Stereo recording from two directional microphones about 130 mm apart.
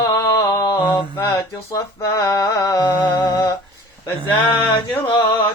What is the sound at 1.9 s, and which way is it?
Music, 25° left (ahead or behind).